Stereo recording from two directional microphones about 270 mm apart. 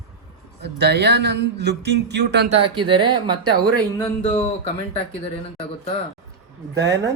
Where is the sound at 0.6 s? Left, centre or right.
Right.